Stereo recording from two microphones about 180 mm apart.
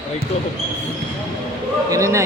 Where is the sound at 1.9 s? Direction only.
15° right (ahead or behind).